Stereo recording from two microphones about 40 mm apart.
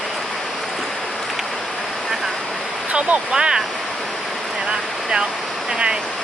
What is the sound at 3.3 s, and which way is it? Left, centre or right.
Speech, centre.